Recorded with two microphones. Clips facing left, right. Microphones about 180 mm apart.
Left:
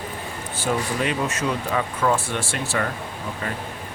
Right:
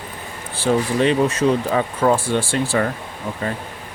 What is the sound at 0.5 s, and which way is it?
Speech, 30° right (ahead or behind).